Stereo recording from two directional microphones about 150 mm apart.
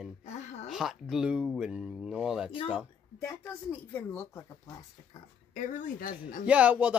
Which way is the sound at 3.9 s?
15° left (ahead or behind).